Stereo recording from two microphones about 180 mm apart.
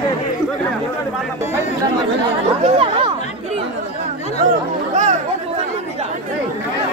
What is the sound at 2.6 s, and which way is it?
Speech, 30° right (ahead or behind).